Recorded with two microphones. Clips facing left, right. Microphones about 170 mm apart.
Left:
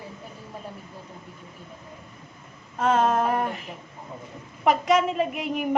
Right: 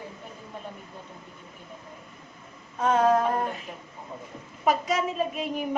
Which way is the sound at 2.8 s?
90° left.